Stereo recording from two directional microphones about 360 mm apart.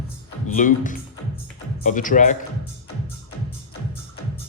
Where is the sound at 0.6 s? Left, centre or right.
Left.